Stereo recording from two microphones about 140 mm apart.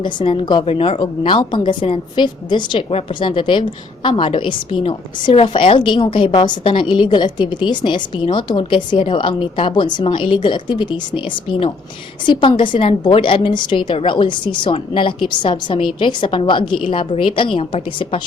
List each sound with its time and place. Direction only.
0.0 s a woman's voice: 35° left (ahead or behind)
12.2 s a woman's voice: 35° left (ahead or behind)